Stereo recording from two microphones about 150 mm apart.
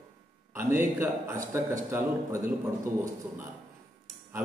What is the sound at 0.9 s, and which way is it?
A man's voice, 20° right (ahead or behind).